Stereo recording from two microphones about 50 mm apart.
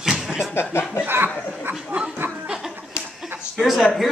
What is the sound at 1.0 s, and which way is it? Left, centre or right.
Speech, right.